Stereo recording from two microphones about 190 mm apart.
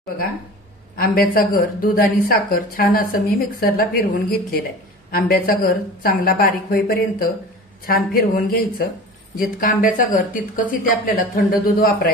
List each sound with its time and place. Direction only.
0.9 s speech: 50° left (ahead or behind)